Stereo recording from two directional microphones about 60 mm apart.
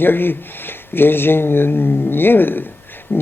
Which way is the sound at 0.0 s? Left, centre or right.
Left.